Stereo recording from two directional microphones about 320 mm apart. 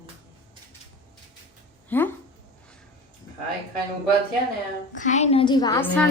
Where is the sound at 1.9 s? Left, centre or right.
Centre.